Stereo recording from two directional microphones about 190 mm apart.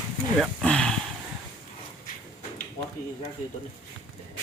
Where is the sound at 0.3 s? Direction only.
5° left (ahead or behind).